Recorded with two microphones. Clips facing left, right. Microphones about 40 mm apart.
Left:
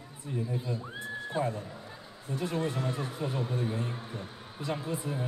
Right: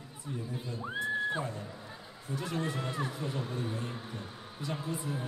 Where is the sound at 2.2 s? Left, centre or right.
Centre.